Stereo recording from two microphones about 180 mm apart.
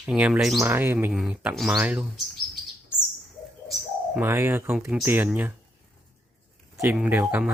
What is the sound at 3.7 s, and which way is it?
Speech, 10° right (ahead or behind).